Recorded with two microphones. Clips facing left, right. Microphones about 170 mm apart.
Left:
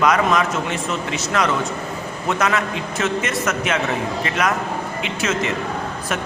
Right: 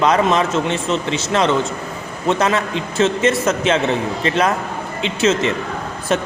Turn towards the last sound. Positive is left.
turn(degrees=-30)  # may be behind; listen again after turning